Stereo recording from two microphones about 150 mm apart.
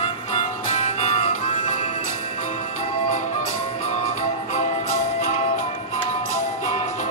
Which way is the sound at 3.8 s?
45° left (ahead or behind).